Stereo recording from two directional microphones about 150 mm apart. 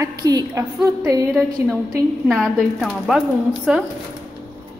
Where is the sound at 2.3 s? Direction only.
Centre (ahead or behind).